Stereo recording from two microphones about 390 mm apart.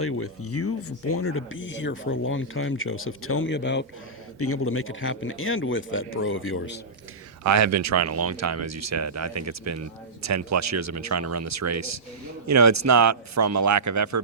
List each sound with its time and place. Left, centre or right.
0.0 s speech: left
7.4 s speech: right